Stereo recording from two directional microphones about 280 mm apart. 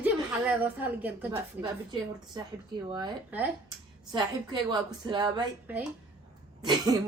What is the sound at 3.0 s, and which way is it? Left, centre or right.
A woman's voice, centre.